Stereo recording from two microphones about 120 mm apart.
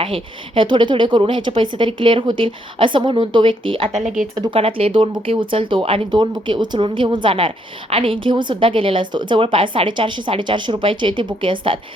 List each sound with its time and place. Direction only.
0.0 s speech: 50° right (ahead or behind)
4.0 s speech: 90° right
4.5 s speech: 50° right (ahead or behind)